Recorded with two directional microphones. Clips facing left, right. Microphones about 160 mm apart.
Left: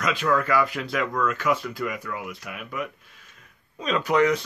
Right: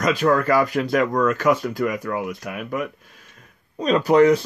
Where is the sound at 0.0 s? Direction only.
40° right (ahead or behind).